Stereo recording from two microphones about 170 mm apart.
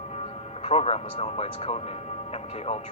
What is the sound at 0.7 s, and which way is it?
Speech, 35° left (ahead or behind).